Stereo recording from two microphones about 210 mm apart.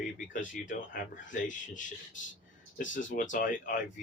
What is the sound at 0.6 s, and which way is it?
Speech, 40° left (ahead or behind).